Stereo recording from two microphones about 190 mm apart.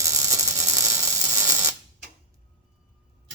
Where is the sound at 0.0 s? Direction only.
15° right (ahead or behind).